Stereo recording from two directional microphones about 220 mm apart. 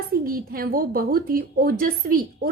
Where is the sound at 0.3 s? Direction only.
40° right (ahead or behind).